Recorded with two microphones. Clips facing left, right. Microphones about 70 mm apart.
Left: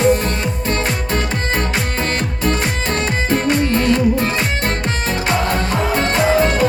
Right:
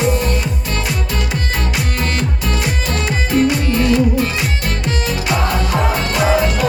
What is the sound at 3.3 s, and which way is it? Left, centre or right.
Music, left.